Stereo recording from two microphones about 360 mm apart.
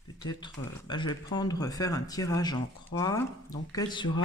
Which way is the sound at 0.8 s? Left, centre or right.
Centre.